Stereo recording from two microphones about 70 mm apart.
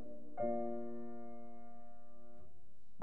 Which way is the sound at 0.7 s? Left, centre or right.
Centre.